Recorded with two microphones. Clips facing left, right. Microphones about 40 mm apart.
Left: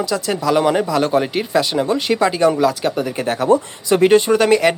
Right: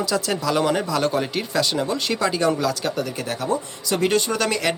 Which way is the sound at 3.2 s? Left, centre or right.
Left.